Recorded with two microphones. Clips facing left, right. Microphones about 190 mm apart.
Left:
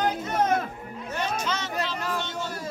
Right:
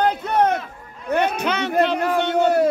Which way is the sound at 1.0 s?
60° right (ahead or behind).